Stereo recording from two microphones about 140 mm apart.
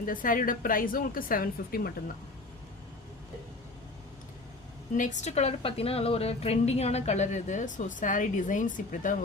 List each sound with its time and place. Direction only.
0.0 s a woman's voice: 80° left
4.9 s a woman's voice: 60° left (ahead or behind)